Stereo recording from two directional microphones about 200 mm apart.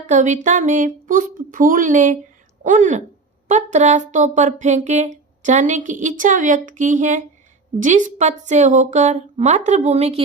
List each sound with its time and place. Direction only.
0.1 s speech: 40° right (ahead or behind)